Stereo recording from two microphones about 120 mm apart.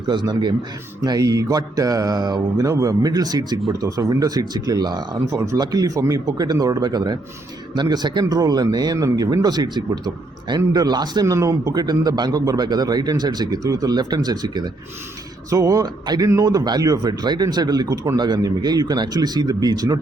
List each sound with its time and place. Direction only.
0.0 s a man's voice: 35° right (ahead or behind)